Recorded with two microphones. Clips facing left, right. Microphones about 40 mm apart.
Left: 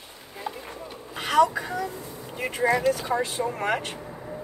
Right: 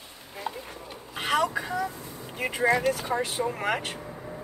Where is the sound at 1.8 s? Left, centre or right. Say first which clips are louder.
Left 1 dB; centre.